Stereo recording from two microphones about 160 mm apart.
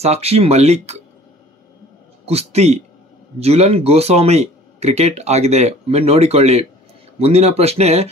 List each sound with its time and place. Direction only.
0.0 s speech: 40° right (ahead or behind)
2.2 s speech: 40° right (ahead or behind)